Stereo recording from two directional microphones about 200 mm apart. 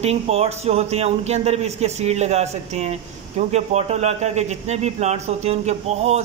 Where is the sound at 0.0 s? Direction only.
30° right (ahead or behind).